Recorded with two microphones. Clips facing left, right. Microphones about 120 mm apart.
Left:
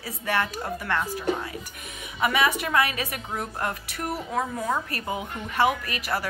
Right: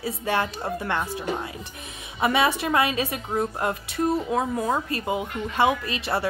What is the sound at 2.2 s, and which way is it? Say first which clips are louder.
A woman's voice: right 2 dB; 30° right (ahead or behind).